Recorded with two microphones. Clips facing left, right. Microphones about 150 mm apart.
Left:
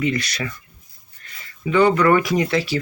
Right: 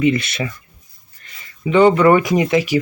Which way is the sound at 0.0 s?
20° right (ahead or behind).